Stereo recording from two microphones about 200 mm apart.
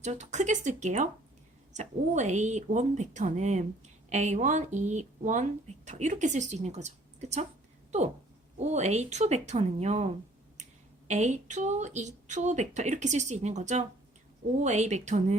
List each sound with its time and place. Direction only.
0.0 s speech: 35° right (ahead or behind)
8.5 s speech: 35° right (ahead or behind)
11.1 s speech: 35° right (ahead or behind)